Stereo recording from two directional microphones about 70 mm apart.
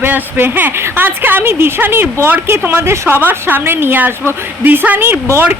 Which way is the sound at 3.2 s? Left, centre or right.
Right.